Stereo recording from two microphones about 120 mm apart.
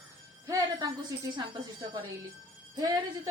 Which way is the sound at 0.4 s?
30° right (ahead or behind).